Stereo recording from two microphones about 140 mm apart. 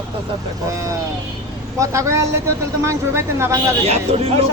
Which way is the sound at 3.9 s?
45° right (ahead or behind).